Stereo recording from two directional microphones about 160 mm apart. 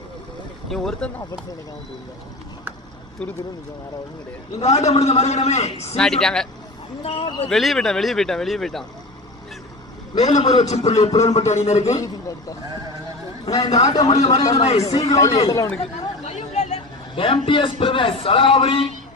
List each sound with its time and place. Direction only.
0.7 s speech: centre (ahead or behind)
4.6 s a man's voice: 45° left (ahead or behind)
6.0 s speech: 5° left (ahead or behind)
7.0 s a man's voice: 35° left (ahead or behind)
7.4 s speech: centre (ahead or behind)
10.2 s a man's voice: 25° left (ahead or behind)
10.5 s a man's voice: 45° left (ahead or behind)
11.8 s a man's voice: 20° left (ahead or behind)
13.7 s a man's voice: 45° left (ahead or behind)
13.9 s a man's voice: 25° left (ahead or behind)
14.2 s a man's voice: 45° left (ahead or behind)
15.4 s a man's voice: 20° left (ahead or behind)
15.8 s a man's voice: 40° left (ahead or behind)